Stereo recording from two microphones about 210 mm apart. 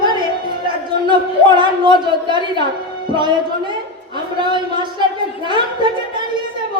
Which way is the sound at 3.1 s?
20° right (ahead or behind).